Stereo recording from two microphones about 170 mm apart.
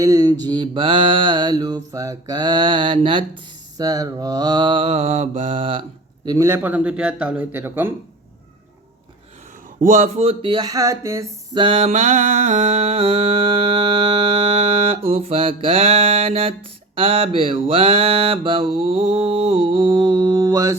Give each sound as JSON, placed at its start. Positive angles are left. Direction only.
{"t": 0.0, "sound": "mantra", "side_deg": -20}
{"t": 6.2, "sound": "a man's voice", "side_deg": -20}
{"t": 9.8, "sound": "mantra", "side_deg": -50}
{"t": 11.6, "sound": "mantra", "side_deg": -35}